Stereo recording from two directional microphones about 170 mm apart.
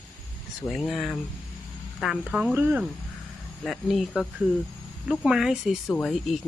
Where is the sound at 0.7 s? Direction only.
Centre (ahead or behind).